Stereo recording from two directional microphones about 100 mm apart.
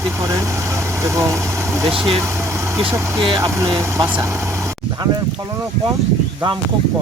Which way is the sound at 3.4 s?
30° right (ahead or behind).